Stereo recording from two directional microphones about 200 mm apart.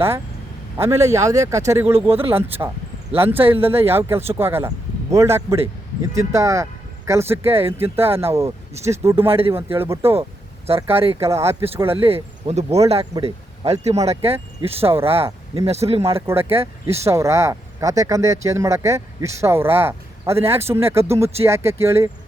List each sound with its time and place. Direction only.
0.8 s speech: 15° right (ahead or behind)
9.2 s speech: 30° right (ahead or behind)
9.7 s speech: 10° right (ahead or behind)
10.9 s speech: 30° right (ahead or behind)
11.3 s speech: 15° right (ahead or behind)
12.0 s speech: 30° right (ahead or behind)
14.2 s speech: 10° right (ahead or behind)
14.6 s speech: 30° right (ahead or behind)
16.2 s speech: 10° right (ahead or behind)